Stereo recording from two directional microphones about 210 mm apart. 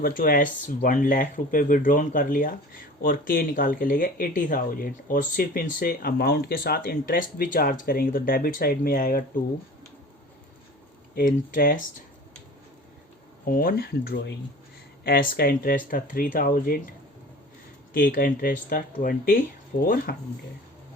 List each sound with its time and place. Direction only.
0.0 s speech: 40° left (ahead or behind)
11.1 s speech: 40° left (ahead or behind)
13.4 s speech: 45° left (ahead or behind)
17.9 s speech: 40° left (ahead or behind)